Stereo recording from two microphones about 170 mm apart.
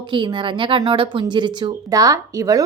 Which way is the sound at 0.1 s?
30° right (ahead or behind).